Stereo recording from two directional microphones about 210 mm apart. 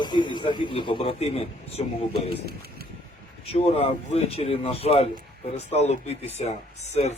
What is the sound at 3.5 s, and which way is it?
Speech, 30° left (ahead or behind).